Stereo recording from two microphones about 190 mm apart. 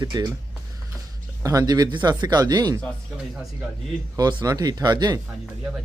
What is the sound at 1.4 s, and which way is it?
Speech, 20° right (ahead or behind).